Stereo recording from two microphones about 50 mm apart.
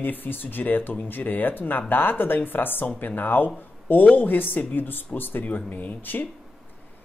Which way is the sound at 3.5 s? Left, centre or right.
Left.